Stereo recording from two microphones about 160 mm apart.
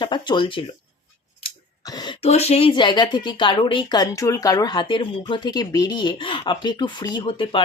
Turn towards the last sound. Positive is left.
turn(degrees=30)  # may be behind; listen again after turning